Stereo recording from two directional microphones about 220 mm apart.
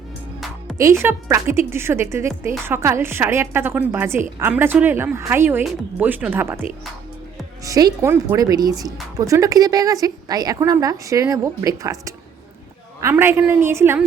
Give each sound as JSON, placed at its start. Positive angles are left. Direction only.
{"t": 0.8, "sound": "speech", "side_deg": -15}
{"t": 7.6, "sound": "speech", "side_deg": -15}